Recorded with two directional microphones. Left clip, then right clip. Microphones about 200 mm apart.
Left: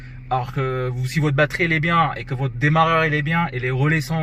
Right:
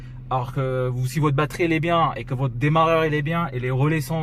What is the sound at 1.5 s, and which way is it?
Speech, 50° right (ahead or behind).